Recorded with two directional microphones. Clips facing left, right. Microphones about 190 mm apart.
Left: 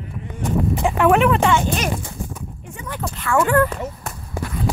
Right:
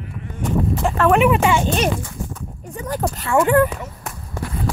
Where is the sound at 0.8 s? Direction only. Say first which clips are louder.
Left 1 dB; 10° left (ahead or behind).